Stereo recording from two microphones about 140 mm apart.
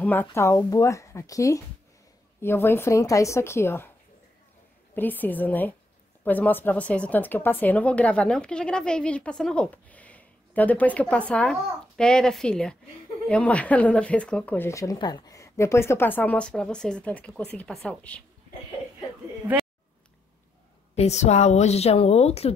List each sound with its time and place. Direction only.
0.0 s speech: 10° left (ahead or behind)
4.9 s a woman's voice: 15° left (ahead or behind)
20.9 s a woman's voice: 50° left (ahead or behind)